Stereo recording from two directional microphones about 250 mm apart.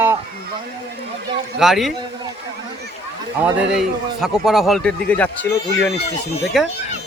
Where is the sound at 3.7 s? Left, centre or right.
Centre.